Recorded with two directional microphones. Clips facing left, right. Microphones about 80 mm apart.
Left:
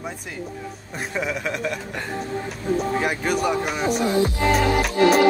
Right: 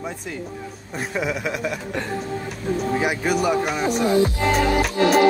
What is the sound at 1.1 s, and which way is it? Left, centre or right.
Speech, centre.